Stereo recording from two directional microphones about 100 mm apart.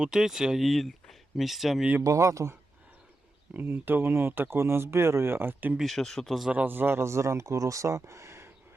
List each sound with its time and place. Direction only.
0.0 s speech: 5° right (ahead or behind)
2.0 s speech: 30° right (ahead or behind)
3.5 s speech: 20° right (ahead or behind)
5.7 s speech: centre (ahead or behind)
6.5 s speech: 15° right (ahead or behind)